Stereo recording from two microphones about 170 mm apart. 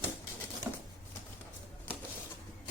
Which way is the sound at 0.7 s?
10° right (ahead or behind).